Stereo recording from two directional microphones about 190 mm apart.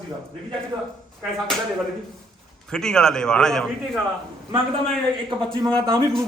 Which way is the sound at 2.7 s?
5° left (ahead or behind).